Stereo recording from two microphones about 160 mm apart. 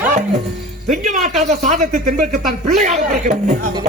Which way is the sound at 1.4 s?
50° right (ahead or behind).